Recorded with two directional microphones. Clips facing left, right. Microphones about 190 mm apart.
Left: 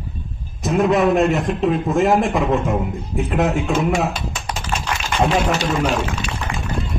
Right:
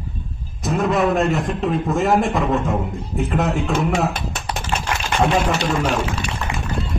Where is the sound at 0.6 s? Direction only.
Centre (ahead or behind).